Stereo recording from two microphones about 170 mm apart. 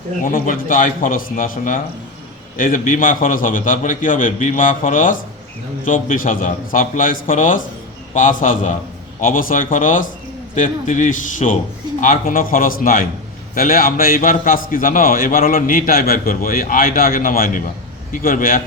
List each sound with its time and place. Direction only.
0.3 s a man's voice: 55° left (ahead or behind)